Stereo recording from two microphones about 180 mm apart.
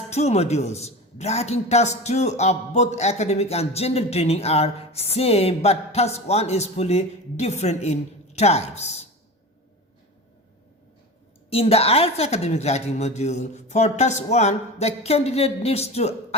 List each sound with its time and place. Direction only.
0.1 s a man's voice: 35° left (ahead or behind)
11.5 s a man's voice: 35° left (ahead or behind)